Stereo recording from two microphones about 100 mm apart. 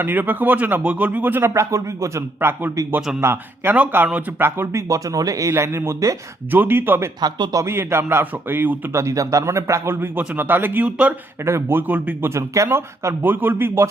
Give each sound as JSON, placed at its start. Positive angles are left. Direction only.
{"t": 0.0, "sound": "speech", "side_deg": -20}
{"t": 6.5, "sound": "speech", "side_deg": -20}
{"t": 7.2, "sound": "speech", "side_deg": -45}
{"t": 7.5, "sound": "speech", "side_deg": -25}
{"t": 9.0, "sound": "speech", "side_deg": -30}
{"t": 11.4, "sound": "speech", "side_deg": -25}
{"t": 12.3, "sound": "speech", "side_deg": -30}